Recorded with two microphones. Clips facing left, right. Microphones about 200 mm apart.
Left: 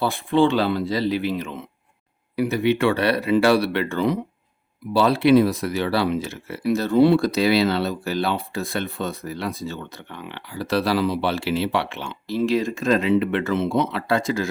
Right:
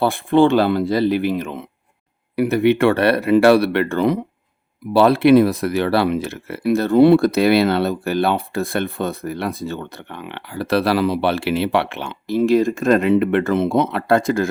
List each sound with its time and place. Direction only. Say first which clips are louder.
0.0 s speech: right 4 dB; 55° right (ahead or behind)